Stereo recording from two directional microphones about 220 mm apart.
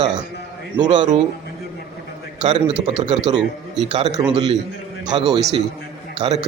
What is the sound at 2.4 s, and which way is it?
Speech, 25° right (ahead or behind).